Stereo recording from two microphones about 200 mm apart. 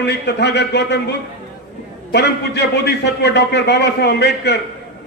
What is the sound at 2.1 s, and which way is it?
A man's voice, 55° left (ahead or behind).